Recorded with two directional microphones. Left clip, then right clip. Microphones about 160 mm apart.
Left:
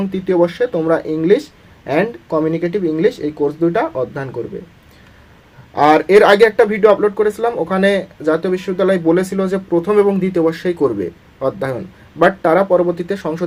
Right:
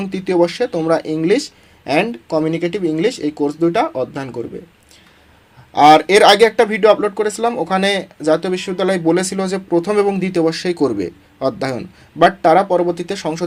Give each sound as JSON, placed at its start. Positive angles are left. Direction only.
{"t": 0.0, "sound": "speech", "side_deg": -35}
{"t": 5.7, "sound": "speech", "side_deg": -40}